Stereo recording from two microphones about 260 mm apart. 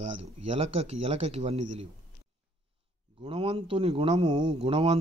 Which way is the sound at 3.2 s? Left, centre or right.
Right.